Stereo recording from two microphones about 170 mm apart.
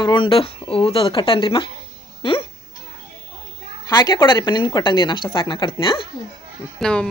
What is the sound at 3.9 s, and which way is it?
A woman's voice, 20° left (ahead or behind).